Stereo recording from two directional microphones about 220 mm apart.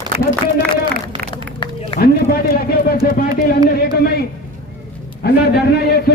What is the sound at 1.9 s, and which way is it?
Speech, 45° left (ahead or behind).